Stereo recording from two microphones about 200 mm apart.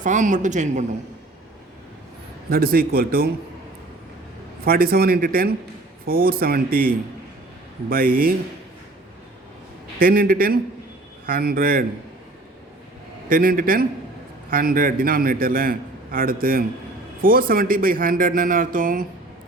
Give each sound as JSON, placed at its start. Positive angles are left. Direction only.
{"t": 0.0, "sound": "speech", "side_deg": -40}
{"t": 2.5, "sound": "a man's voice", "side_deg": -50}
{"t": 4.6, "sound": "a man's voice", "side_deg": -50}
{"t": 10.0, "sound": "a man's voice", "side_deg": -45}
{"t": 13.2, "sound": "a man's voice", "side_deg": -45}